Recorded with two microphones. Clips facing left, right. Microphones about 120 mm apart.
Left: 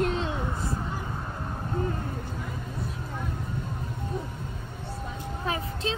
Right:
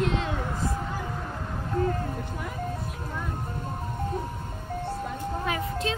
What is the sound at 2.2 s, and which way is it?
Music, 65° right (ahead or behind).